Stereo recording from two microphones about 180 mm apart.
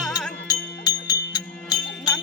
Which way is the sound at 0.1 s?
20° left (ahead or behind).